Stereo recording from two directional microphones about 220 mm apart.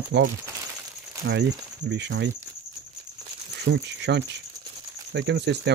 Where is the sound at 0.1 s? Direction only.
55° right (ahead or behind).